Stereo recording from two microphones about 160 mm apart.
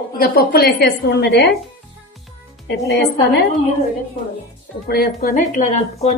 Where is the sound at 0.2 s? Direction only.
70° left (ahead or behind); by 1.5 s 90° left.